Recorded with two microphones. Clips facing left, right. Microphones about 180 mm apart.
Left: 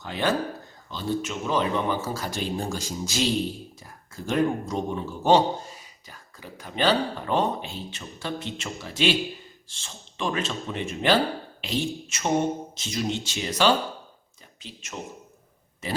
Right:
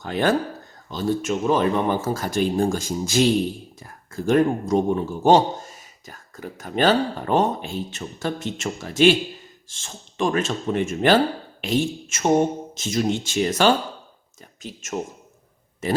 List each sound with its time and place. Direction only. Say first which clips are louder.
0.0 s speech: right 5 dB; 50° right (ahead or behind)